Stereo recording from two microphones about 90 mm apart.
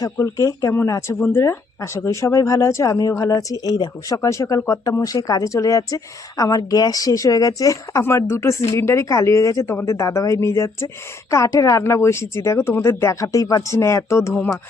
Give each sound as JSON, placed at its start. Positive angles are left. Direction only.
{"t": 0.2, "sound": "speech", "side_deg": 35}